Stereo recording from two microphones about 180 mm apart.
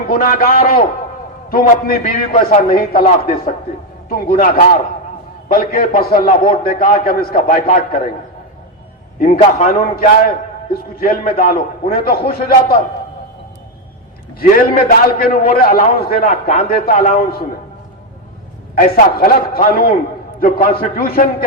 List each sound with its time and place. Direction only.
0.1 s a man's voice: 50° left (ahead or behind)
9.1 s a man's voice: 50° left (ahead or behind)
14.3 s a man's voice: 55° left (ahead or behind)
16.2 s speech: 35° left (ahead or behind)
16.6 s a man's voice: 55° left (ahead or behind)
16.9 s speech: 35° left (ahead or behind)
18.8 s a man's voice: 45° left (ahead or behind)